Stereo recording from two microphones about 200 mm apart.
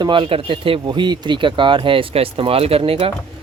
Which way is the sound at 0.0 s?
25° right (ahead or behind).